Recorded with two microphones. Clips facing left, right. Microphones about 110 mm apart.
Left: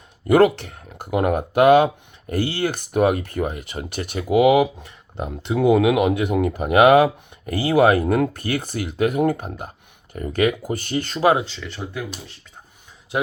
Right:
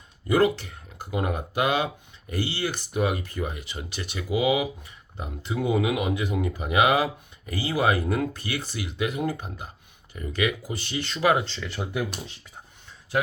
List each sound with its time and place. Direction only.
0.3 s speech: 60° left (ahead or behind); by 11.3 s 45° left (ahead or behind)
11.4 s speech: 5° left (ahead or behind)